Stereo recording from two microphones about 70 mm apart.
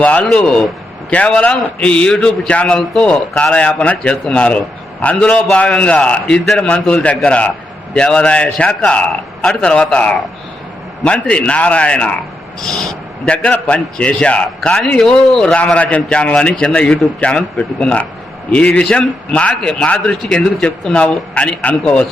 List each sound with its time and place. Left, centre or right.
0.0 s a man's voice: centre
0.3 s a man's voice: centre
1.1 s a man's voice: left
12.6 s speech: centre
13.2 s a man's voice: centre
15.6 s a man's voice: centre